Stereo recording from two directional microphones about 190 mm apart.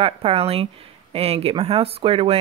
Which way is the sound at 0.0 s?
30° right (ahead or behind).